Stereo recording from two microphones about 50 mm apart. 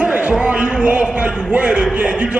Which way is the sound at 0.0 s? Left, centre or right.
Right.